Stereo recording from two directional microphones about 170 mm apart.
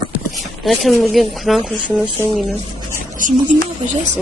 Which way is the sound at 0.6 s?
Centre (ahead or behind).